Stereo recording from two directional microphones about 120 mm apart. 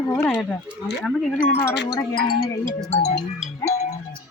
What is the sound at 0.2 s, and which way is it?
Speech, 10° left (ahead or behind).